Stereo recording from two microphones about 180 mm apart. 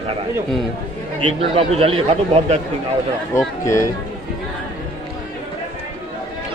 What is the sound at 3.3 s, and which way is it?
Speech, 15° left (ahead or behind).